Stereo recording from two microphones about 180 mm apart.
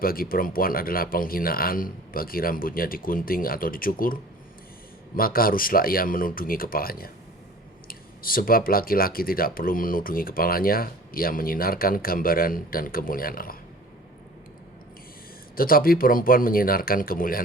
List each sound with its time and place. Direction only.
0.0 s speech: 55° left (ahead or behind)
15.5 s speech: 55° left (ahead or behind)